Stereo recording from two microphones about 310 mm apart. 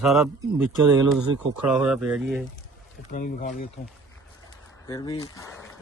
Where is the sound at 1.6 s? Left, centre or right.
Centre.